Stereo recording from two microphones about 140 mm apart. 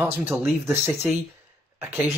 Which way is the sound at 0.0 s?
15° right (ahead or behind).